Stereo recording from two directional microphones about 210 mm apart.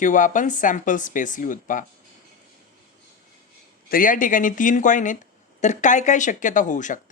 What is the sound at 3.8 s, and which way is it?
Speech, 40° left (ahead or behind).